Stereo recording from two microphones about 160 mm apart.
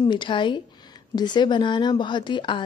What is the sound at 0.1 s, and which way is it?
A woman's voice, 30° left (ahead or behind).